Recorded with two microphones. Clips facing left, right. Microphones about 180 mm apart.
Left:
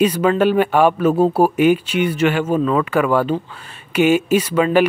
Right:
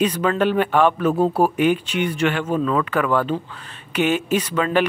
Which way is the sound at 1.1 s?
25° left (ahead or behind).